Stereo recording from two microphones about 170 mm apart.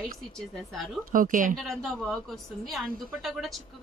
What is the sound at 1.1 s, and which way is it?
Speech, 50° right (ahead or behind).